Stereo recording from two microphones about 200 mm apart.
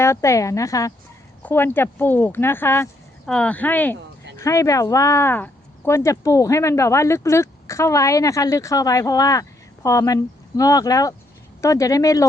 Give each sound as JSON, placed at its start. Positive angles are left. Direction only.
{"t": 0.0, "sound": "speech", "side_deg": 15}